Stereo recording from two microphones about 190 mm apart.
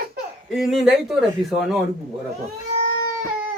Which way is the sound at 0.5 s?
Centre (ahead or behind).